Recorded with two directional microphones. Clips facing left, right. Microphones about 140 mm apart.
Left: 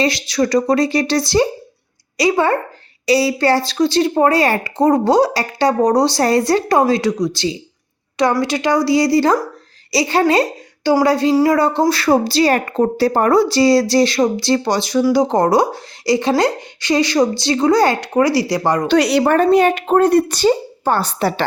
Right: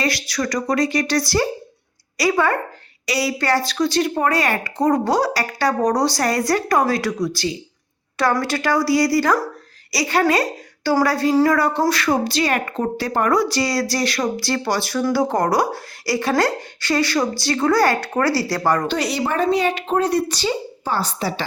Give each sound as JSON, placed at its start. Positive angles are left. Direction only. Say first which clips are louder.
{"t": 0.0, "sound": "a woman's voice", "louder": "left 6 dB", "side_deg": 25}
{"t": 18.9, "sound": "speech", "louder": "left 8 dB", "side_deg": 75}